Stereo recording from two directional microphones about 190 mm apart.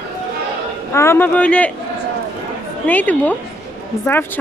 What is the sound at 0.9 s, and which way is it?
Speech, 10° left (ahead or behind).